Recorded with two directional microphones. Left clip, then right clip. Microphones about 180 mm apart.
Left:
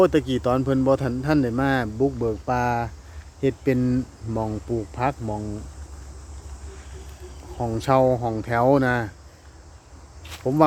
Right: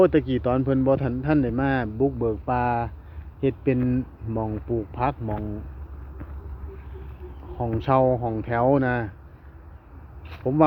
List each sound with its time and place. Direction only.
0.0 s a man's voice: 20° left (ahead or behind)
7.6 s a man's voice: 25° left (ahead or behind)
10.4 s speech: 20° left (ahead or behind)